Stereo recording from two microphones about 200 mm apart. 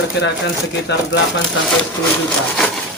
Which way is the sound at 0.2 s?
60° left (ahead or behind).